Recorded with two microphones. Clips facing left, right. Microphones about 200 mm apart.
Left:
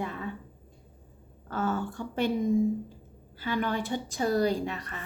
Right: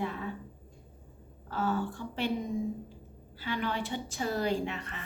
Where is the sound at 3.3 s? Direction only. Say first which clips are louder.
Left 4 dB; 45° left (ahead or behind).